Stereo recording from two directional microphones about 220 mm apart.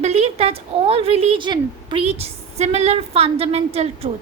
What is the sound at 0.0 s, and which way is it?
A woman's voice, 30° right (ahead or behind).